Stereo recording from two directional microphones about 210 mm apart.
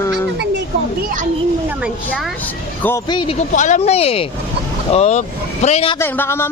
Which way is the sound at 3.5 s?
35° left (ahead or behind).